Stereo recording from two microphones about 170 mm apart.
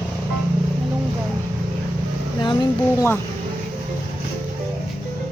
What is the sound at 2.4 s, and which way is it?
Speech, 25° left (ahead or behind).